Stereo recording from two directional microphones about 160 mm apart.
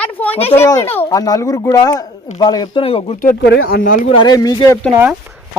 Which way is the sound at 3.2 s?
75° left (ahead or behind).